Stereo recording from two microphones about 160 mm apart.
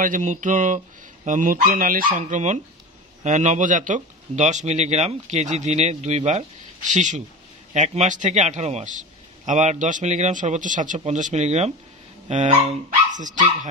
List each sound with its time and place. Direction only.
0.0 s speech: 50° right (ahead or behind)